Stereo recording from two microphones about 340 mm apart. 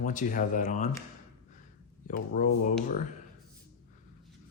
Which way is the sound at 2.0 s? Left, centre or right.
Left.